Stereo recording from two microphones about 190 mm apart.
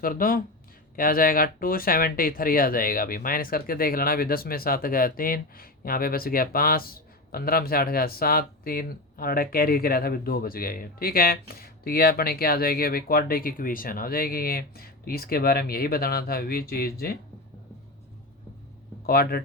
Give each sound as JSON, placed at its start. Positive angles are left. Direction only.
{"t": 0.0, "sound": "speech", "side_deg": 50}
{"t": 19.0, "sound": "speech", "side_deg": 55}